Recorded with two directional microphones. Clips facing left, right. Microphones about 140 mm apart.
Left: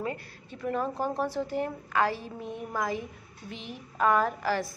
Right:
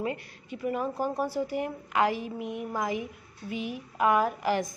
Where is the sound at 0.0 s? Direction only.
15° right (ahead or behind).